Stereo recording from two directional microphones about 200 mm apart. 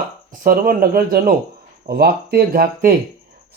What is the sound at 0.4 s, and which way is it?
Speech, 45° right (ahead or behind).